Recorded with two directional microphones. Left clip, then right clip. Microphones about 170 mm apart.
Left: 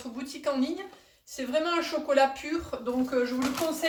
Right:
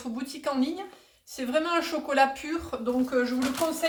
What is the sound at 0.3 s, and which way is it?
Speech, 20° right (ahead or behind).